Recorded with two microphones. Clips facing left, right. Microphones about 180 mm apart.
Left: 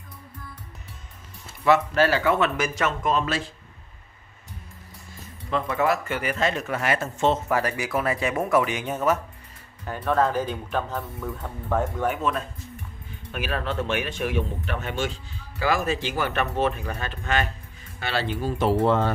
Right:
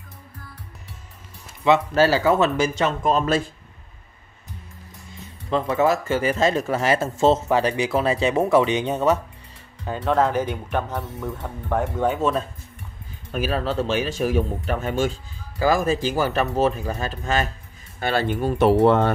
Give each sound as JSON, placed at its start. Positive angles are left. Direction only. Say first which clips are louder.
{"t": 2.0, "sound": "speech", "louder": "right 3 dB", "side_deg": -35}
{"t": 5.5, "sound": "speech", "louder": "right 4 dB", "side_deg": -30}
{"t": 12.2, "sound": "speech", "louder": "right 5 dB", "side_deg": -30}
{"t": 18.0, "sound": "speech", "louder": "right 5 dB", "side_deg": -50}